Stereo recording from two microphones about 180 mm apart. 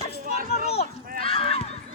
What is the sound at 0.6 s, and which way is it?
Speech, 35° left (ahead or behind).